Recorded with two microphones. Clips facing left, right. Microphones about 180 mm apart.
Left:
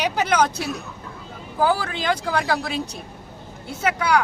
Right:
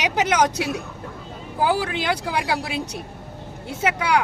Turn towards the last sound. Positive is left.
turn(degrees=-20)  # may be behind; listen again after turning